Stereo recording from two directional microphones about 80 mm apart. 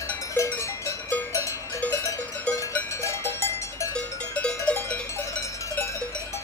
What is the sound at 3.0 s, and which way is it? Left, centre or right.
Cowbell, left.